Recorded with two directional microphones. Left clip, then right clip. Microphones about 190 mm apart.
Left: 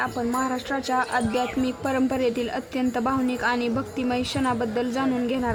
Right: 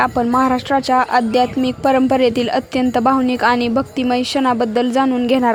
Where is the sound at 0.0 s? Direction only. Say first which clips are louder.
Right 11 dB; 45° right (ahead or behind).